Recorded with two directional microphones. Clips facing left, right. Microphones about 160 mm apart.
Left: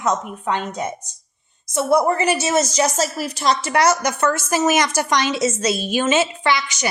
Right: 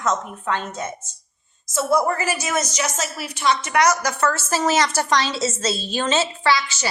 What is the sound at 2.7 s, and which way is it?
A woman's voice, 35° left (ahead or behind).